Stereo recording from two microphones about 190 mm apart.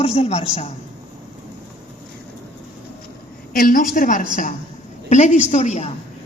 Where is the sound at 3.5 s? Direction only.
45° left (ahead or behind).